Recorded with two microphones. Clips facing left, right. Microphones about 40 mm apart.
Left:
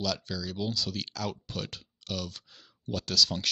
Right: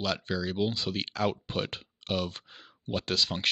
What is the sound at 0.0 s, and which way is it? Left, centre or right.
Speech, right.